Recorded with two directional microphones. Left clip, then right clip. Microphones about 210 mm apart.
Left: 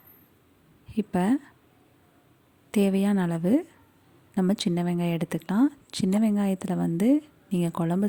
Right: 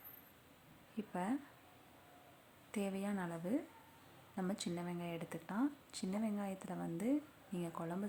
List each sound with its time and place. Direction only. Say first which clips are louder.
0.9 s speech: left 15 dB; 45° left (ahead or behind)
2.7 s speech: left 17 dB; 40° left (ahead or behind)